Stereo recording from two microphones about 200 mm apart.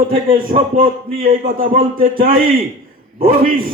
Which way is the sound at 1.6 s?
45° right (ahead or behind).